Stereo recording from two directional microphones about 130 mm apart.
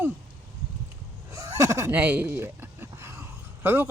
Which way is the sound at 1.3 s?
20° right (ahead or behind).